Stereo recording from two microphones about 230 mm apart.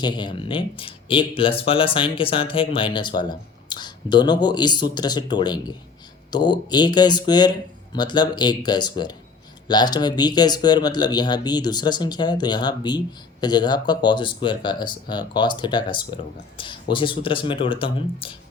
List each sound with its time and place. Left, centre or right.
0.0 s speech: centre